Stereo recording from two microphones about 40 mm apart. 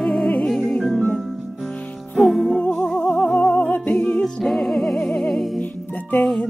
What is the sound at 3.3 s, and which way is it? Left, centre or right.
Music, left.